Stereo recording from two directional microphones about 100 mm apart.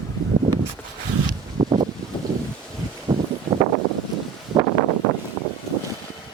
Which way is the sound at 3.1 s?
30° right (ahead or behind).